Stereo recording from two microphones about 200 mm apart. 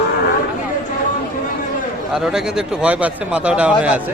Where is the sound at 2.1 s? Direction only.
5° right (ahead or behind).